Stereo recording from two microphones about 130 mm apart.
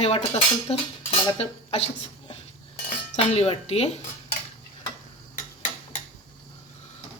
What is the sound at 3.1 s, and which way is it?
Speech, 55° left (ahead or behind).